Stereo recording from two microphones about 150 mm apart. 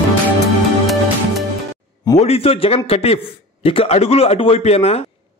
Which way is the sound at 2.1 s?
45° left (ahead or behind).